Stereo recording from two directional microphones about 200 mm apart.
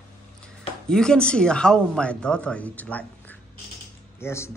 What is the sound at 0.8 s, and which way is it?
Speech, 5° left (ahead or behind).